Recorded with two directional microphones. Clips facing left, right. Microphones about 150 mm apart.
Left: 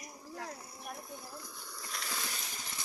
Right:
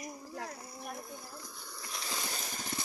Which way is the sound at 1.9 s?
25° right (ahead or behind).